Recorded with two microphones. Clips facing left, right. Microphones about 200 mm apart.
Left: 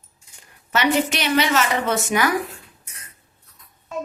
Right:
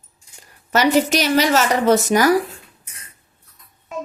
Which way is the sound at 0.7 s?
40° right (ahead or behind).